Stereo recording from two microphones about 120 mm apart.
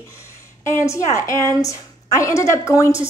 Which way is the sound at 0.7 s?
25° left (ahead or behind).